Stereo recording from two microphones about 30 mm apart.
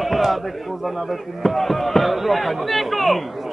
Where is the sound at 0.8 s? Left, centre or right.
Centre.